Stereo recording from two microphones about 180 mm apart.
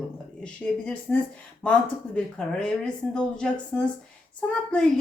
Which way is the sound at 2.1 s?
5° left (ahead or behind).